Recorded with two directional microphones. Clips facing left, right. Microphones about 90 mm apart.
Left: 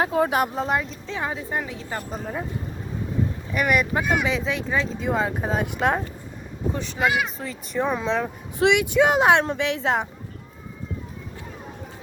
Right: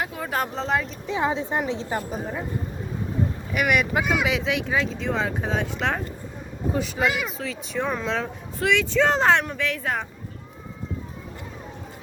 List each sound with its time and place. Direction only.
0.0 s speech: 30° left (ahead or behind)
0.3 s speech: 10° left (ahead or behind)
1.0 s a woman's voice: 20° right (ahead or behind)
2.0 s speech: 5° right (ahead or behind)
3.5 s speech: 5° right (ahead or behind)
6.7 s speech: 5° right (ahead or behind)
8.5 s speech: 15° left (ahead or behind)
9.4 s a woman's voice: 25° left (ahead or behind)